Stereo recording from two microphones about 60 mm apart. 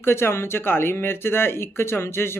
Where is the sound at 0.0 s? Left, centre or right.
Left.